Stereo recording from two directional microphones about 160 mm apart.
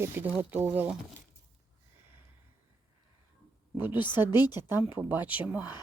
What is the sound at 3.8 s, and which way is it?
A woman's voice, 10° right (ahead or behind).